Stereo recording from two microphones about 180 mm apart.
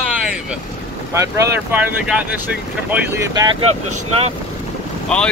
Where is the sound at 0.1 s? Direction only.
5° right (ahead or behind).